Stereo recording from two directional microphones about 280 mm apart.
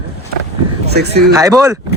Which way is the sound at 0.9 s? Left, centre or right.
Right.